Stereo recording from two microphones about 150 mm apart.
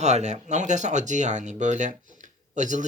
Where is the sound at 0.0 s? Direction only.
50° right (ahead or behind).